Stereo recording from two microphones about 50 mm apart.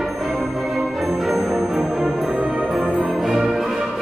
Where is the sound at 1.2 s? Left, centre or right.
Centre.